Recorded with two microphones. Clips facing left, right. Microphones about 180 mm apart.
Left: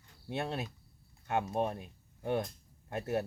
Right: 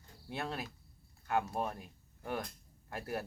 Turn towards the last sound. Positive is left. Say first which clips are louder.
# left 6 dB
turn(degrees=25)  # may be behind; listen again after turning